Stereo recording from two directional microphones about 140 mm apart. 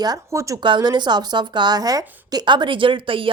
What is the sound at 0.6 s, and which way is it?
Speech, 35° right (ahead or behind).